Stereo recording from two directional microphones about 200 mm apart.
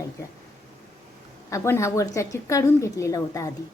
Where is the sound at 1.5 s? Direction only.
15° left (ahead or behind).